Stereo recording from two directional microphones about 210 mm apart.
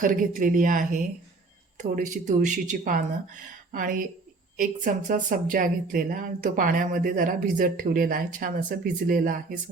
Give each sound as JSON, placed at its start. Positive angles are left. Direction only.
{"t": 0.0, "sound": "a woman's voice", "side_deg": -40}